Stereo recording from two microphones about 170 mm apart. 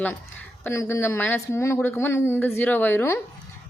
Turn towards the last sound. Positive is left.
turn(degrees=15)  # may be behind; listen again after turning